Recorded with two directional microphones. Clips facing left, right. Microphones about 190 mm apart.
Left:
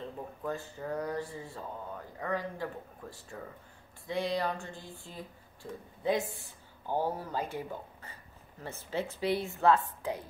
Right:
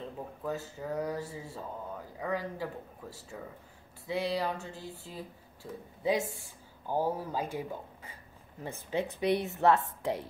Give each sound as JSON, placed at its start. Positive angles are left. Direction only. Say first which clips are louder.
{"t": 0.4, "sound": "speech", "louder": "right 1 dB", "side_deg": -5}
{"t": 4.1, "sound": "a sound", "louder": "even", "side_deg": -5}
{"t": 5.0, "sound": "a woman's voice", "louder": "right 2 dB", "side_deg": -5}